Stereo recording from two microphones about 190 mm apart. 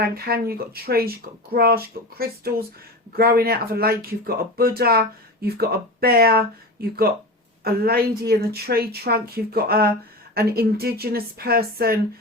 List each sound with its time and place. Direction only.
0.0 s speech: 55° right (ahead or behind)
7.6 s speech: 55° right (ahead or behind)